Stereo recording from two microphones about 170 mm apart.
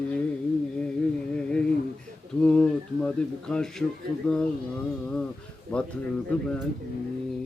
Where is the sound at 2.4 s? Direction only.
5° left (ahead or behind).